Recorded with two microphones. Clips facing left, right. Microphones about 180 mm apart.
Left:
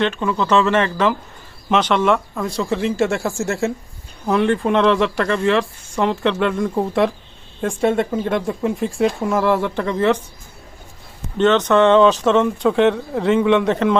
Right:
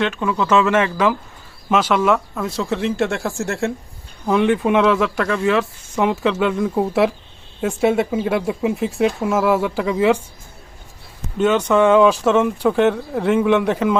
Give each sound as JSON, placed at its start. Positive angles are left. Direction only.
{"t": 0.0, "sound": "speech", "side_deg": -5}
{"t": 11.3, "sound": "speech", "side_deg": -10}